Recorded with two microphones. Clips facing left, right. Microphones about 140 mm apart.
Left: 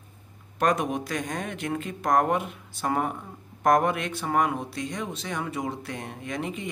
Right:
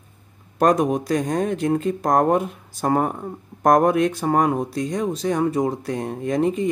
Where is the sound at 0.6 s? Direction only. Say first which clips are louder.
Right 7 dB; 35° right (ahead or behind).